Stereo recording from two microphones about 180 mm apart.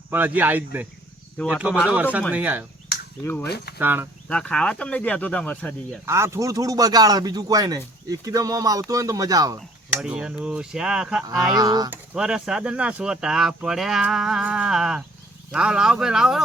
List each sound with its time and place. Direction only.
0.1 s speech: 10° right (ahead or behind)
3.4 s speech: 65° left (ahead or behind)
3.8 s speech: 10° right (ahead or behind)
4.3 s speech: 5° left (ahead or behind)
6.1 s speech: 15° right (ahead or behind)
9.9 s speech: 5° right (ahead or behind)
11.5 s speech: 20° right (ahead or behind)
11.9 s speech: 5° right (ahead or behind)